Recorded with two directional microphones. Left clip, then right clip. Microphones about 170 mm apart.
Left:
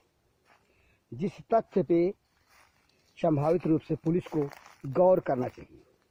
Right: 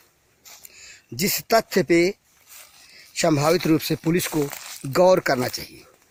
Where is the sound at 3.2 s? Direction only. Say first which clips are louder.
Right 7 dB; 20° right (ahead or behind).